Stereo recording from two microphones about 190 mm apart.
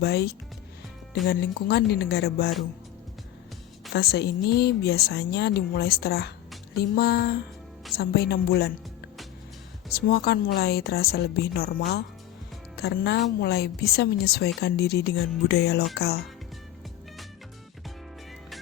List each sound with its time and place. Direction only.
0.0 s a woman's voice: 55° left (ahead or behind)
3.9 s a woman's voice: 55° left (ahead or behind)
9.9 s a woman's voice: 55° left (ahead or behind)